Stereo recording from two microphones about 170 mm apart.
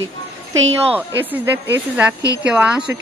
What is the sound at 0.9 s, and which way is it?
Speech, 10° right (ahead or behind).